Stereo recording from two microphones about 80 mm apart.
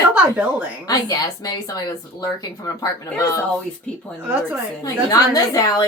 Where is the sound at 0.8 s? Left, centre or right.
Left.